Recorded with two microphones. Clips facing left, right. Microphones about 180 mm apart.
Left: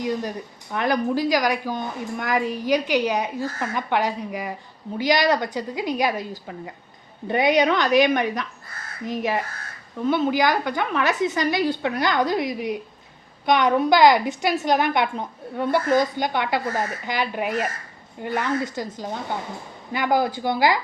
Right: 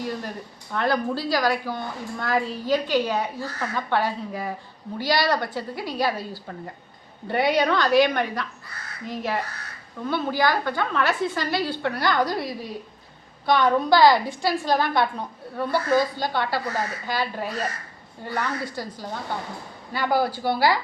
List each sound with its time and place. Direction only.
0.0 s a woman's voice: 15° left (ahead or behind)